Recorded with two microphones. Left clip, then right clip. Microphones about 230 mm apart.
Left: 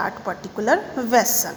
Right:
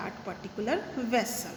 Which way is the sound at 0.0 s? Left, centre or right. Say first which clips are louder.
Left 12 dB; centre.